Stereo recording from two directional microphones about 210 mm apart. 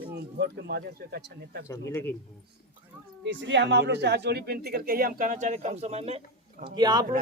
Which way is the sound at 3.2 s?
60° right (ahead or behind).